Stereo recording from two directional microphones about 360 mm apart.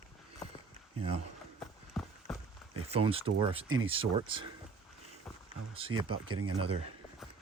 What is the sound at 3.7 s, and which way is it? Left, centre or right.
Speech, right.